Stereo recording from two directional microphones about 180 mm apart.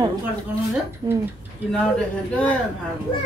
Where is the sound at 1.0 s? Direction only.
25° right (ahead or behind).